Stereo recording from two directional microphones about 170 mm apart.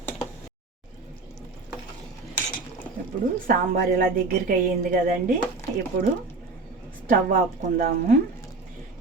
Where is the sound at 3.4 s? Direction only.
55° right (ahead or behind).